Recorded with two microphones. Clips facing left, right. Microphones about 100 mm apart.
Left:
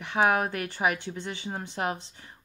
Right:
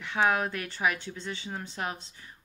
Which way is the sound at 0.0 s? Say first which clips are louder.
Left 2 dB; 20° left (ahead or behind).